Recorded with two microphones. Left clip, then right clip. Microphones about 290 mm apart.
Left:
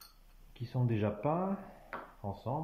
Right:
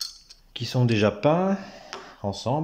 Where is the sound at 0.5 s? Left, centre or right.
Right.